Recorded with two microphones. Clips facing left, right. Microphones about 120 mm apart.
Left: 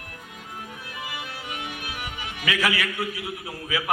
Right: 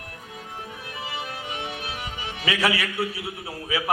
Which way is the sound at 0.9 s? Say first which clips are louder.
Right 3 dB; 30° right (ahead or behind).